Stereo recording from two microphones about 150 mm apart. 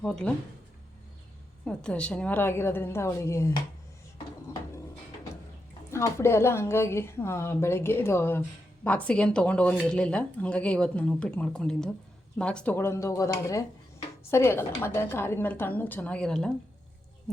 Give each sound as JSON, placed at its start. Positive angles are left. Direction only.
{"t": 0.0, "sound": "speech", "side_deg": 5}
{"t": 1.6, "sound": "a woman's voice", "side_deg": 5}
{"t": 5.9, "sound": "a woman's voice", "side_deg": 20}